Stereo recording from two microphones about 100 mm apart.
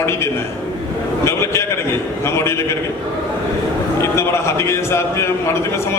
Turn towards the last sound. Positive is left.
turn(degrees=25)  # may be behind; listen again after turning